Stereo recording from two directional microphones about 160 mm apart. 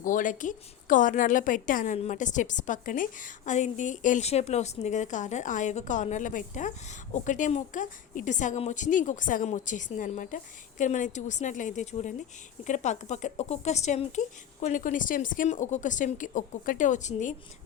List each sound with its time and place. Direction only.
0.0 s a woman's voice: 55° left (ahead or behind)